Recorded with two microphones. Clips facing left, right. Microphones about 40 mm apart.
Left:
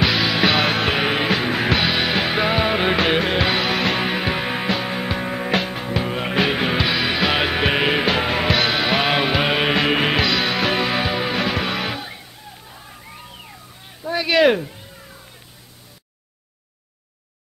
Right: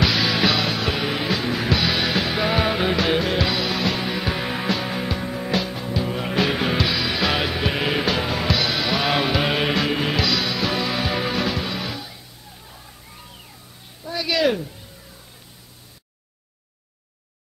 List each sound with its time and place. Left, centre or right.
0.0 s music: centre
0.5 s music: left
1.9 s music: left
2.8 s music: left
4.4 s music: left
5.0 s music: left
7.4 s music: left
9.1 s music: left
9.8 s music: left
11.1 s music: centre
11.5 s music: left
14.0 s a sound: left